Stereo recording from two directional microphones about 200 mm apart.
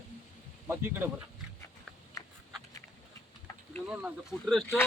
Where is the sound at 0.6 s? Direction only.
10° right (ahead or behind).